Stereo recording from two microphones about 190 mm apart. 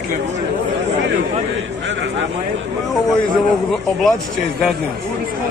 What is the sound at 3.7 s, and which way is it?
Speech, centre (ahead or behind).